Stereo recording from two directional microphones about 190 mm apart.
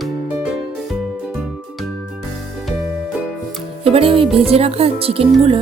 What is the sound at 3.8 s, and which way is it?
Speech, 30° right (ahead or behind).